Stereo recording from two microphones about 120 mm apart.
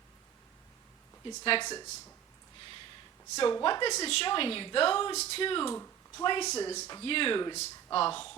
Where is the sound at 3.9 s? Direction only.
60° left (ahead or behind).